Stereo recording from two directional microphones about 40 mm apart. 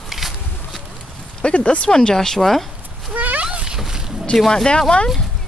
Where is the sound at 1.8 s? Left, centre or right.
Centre.